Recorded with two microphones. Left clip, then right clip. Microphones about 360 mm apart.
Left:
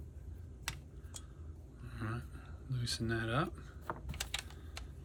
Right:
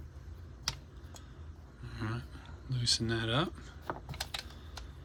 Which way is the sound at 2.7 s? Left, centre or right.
Centre.